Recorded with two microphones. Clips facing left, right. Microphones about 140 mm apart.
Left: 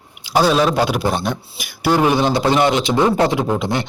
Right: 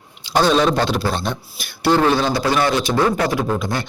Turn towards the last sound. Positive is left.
turn(degrees=20)  # may be behind; listen again after turning